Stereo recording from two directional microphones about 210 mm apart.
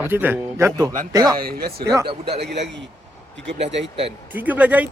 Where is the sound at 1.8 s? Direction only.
15° right (ahead or behind).